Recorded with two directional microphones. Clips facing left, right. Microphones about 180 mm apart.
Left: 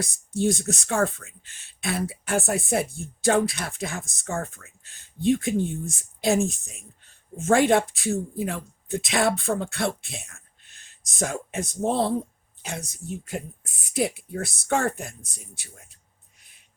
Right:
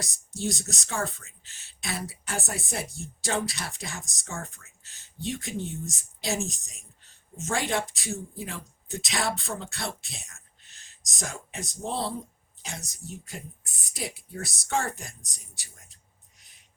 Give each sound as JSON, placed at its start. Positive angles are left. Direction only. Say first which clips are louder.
{"t": 0.0, "sound": "speech", "louder": "left 8 dB", "side_deg": 55}